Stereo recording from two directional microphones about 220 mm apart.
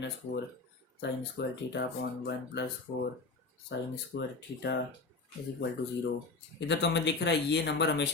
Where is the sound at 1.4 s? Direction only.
50° left (ahead or behind).